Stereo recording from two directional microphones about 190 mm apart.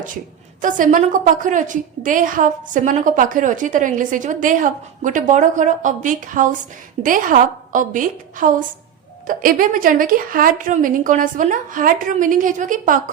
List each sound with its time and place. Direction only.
0.6 s a woman's voice: 45° right (ahead or behind)